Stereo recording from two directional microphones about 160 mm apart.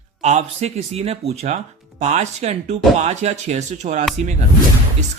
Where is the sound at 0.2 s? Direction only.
45° right (ahead or behind).